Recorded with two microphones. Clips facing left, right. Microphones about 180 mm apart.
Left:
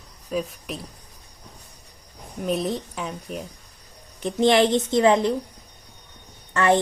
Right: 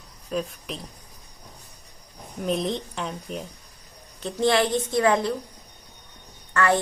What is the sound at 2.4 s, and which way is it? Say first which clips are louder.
A woman's voice: left 1 dB; 5° left (ahead or behind).